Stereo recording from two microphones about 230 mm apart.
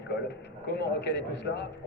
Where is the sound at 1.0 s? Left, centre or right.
Left.